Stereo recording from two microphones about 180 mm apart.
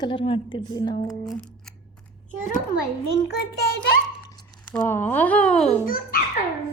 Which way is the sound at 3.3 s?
65° left (ahead or behind).